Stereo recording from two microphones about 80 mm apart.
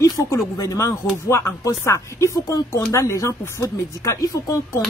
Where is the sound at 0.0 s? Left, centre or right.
Left.